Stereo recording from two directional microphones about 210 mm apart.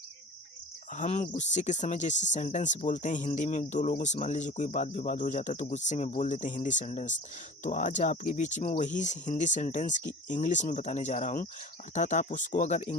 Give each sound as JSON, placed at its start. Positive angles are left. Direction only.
{"t": 0.9, "sound": "speech", "side_deg": 35}